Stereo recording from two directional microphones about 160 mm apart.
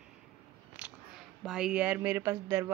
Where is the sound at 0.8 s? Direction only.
5° right (ahead or behind).